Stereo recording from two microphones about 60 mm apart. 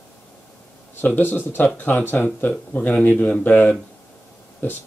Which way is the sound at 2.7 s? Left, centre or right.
Left.